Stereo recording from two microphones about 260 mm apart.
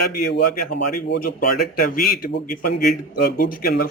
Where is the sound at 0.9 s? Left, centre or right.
Left.